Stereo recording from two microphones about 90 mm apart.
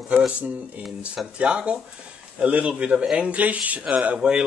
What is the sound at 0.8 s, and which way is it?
A man's voice, centre (ahead or behind).